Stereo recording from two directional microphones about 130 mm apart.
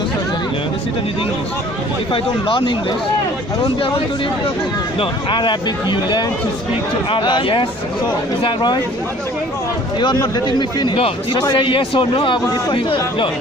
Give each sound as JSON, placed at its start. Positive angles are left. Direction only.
{"t": 2.1, "sound": "a man's voice", "side_deg": 40}
{"t": 10.0, "sound": "a man's voice", "side_deg": 35}